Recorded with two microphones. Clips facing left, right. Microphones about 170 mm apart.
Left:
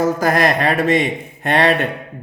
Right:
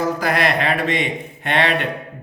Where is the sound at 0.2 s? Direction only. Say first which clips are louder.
Left 3 dB; 45° left (ahead or behind).